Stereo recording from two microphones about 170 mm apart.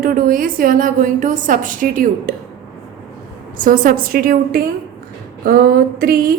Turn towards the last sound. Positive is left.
turn(degrees=-65)  # may be behind; listen again after turning